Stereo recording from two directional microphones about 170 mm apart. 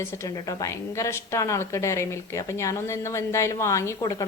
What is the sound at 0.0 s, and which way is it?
A woman's voice, 20° left (ahead or behind).